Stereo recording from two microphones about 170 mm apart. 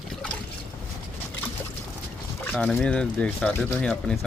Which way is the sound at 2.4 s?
5° left (ahead or behind).